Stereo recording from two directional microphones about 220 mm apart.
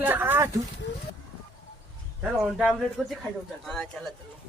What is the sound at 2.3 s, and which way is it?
A man's voice, centre (ahead or behind).